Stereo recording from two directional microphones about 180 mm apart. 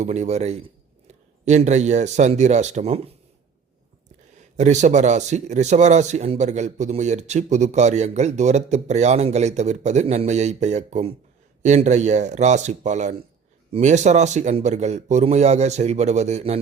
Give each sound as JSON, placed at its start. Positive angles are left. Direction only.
{"t": 0.0, "sound": "a man's voice", "side_deg": -40}
{"t": 4.5, "sound": "a man's voice", "side_deg": -40}